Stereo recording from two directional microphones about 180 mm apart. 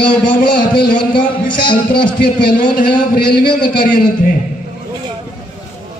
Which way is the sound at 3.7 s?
50° left (ahead or behind).